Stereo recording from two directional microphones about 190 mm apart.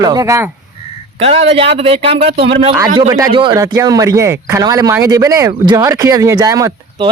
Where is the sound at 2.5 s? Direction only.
30° right (ahead or behind).